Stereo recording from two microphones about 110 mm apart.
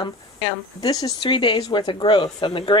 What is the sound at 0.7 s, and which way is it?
Speech, 35° left (ahead or behind).